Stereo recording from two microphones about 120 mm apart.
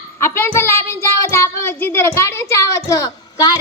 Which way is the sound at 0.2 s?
20° left (ahead or behind).